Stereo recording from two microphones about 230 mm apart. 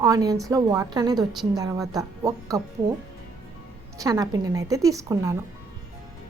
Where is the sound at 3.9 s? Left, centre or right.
Centre.